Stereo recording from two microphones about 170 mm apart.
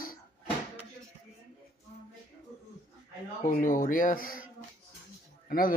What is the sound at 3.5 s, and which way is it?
Speech, 55° left (ahead or behind).